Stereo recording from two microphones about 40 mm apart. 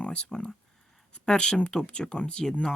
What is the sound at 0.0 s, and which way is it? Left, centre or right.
Speech, left.